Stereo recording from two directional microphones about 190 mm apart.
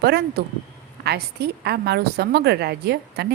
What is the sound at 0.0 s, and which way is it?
A woman's voice, 55° right (ahead or behind).